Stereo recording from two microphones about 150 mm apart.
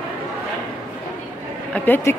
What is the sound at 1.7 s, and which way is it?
Speech, 10° left (ahead or behind).